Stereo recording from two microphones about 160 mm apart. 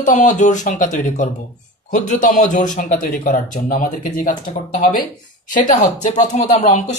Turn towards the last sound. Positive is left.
turn(degrees=45)  # may be behind; listen again after turning